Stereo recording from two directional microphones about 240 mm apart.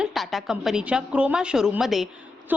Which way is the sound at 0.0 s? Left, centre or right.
Centre.